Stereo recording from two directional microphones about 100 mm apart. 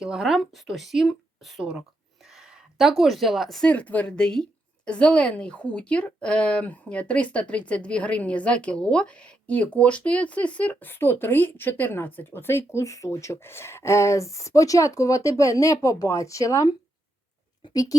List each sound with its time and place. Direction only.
0.0 s speech: 5° right (ahead or behind)
3.7 s speech: 15° left (ahead or behind); by 16.7 s 35° left (ahead or behind)